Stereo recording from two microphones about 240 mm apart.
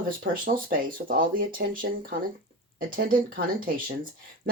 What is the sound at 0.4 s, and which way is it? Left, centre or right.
A woman's voice, right.